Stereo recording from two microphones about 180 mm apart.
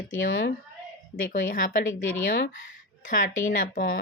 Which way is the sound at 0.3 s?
90° left.